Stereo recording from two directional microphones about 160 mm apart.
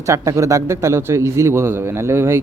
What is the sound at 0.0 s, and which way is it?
Speech, 20° right (ahead or behind).